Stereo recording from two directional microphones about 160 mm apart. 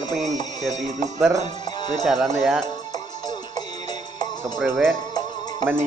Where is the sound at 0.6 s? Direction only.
50° right (ahead or behind).